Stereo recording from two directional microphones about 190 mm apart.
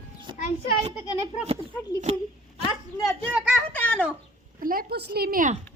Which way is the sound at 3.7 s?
10° left (ahead or behind).